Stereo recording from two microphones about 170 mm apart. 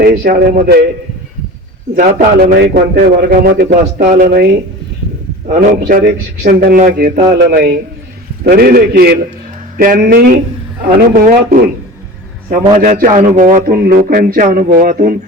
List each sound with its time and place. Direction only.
0.0 s speech: 60° right (ahead or behind)
2.0 s speech: 55° right (ahead or behind)
3.9 s speech: 50° right (ahead or behind)
12.8 s speech: 50° right (ahead or behind)